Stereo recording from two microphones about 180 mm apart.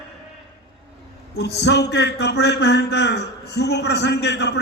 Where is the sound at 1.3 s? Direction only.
70° left (ahead or behind).